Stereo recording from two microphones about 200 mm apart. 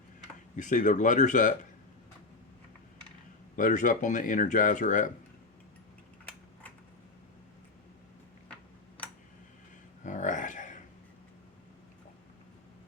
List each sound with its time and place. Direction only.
0.5 s speech: 40° left (ahead or behind)
3.5 s speech: 40° left (ahead or behind)
10.0 s a sound: 40° left (ahead or behind)